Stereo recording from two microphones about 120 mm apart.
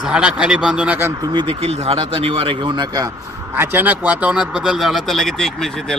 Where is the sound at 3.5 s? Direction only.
15° right (ahead or behind).